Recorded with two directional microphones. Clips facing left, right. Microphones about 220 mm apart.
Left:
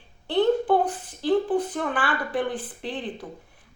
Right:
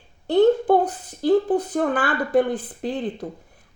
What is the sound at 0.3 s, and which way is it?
A woman's voice, 40° right (ahead or behind).